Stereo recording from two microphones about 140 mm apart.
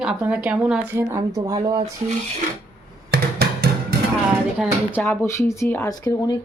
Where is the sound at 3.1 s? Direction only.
90° right.